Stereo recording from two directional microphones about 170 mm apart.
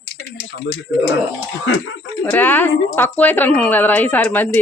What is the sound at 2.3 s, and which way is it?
A woman's voice, 10° left (ahead or behind).